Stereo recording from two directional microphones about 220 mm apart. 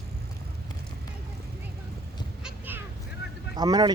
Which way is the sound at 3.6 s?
20° right (ahead or behind).